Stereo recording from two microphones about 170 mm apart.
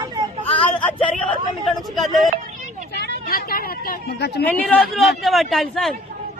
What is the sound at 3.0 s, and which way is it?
Speech, 75° left (ahead or behind).